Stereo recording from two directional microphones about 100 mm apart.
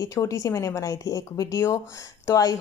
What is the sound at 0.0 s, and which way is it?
Speech, 35° left (ahead or behind).